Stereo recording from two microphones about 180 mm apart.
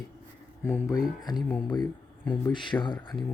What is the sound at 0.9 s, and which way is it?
Speech, 20° left (ahead or behind).